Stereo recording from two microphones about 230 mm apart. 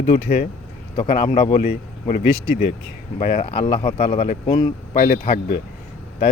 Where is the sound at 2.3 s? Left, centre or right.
Left.